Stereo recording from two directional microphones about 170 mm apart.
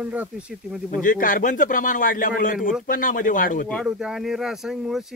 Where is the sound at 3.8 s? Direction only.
5° right (ahead or behind).